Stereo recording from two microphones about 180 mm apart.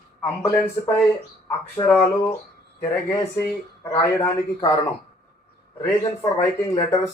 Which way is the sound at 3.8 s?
15° left (ahead or behind).